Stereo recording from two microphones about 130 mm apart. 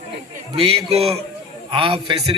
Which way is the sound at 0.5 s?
50° right (ahead or behind).